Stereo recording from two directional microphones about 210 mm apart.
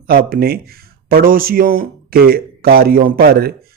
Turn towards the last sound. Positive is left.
turn(degrees=-45)  # may be behind; listen again after turning